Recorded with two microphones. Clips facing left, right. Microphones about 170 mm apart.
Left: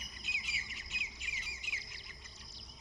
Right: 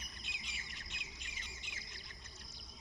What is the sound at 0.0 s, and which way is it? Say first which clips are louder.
Bird: left 2 dB; 5° left (ahead or behind).